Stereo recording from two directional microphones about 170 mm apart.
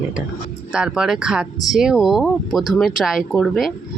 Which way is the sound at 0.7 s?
5° right (ahead or behind).